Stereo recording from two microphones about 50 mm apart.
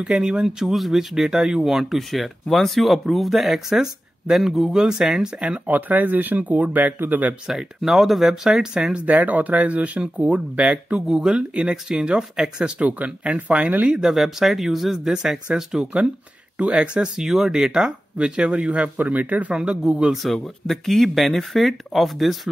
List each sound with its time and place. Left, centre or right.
0.1 s speech: centre
5.7 s speech: right
7.4 s speech: centre
8.9 s speech: right
11.1 s speech: centre
12.8 s speech: right
13.8 s speech: centre
17.2 s speech: centre; by 18.9 s right
18.9 s speech: right
19.5 s speech: centre
20.6 s speech: centre